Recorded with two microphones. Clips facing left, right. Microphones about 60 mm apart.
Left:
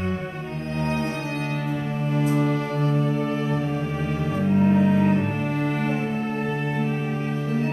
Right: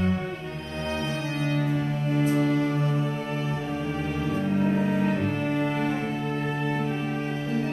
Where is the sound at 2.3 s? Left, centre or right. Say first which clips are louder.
Left 1 dB; left.